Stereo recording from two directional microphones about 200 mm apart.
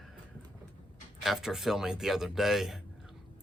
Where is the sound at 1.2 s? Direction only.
Centre (ahead or behind).